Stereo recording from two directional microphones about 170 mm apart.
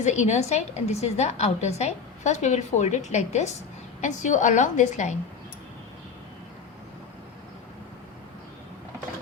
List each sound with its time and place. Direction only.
0.0 s a woman's voice: 45° left (ahead or behind)